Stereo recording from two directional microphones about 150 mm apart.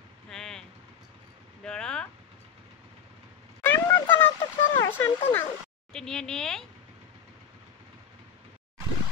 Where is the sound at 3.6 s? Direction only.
15° left (ahead or behind).